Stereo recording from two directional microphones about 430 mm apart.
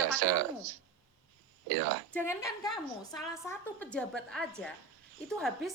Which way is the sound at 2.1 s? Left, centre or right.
Centre.